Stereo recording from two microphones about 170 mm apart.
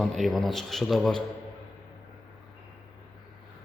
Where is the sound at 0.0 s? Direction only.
Centre (ahead or behind).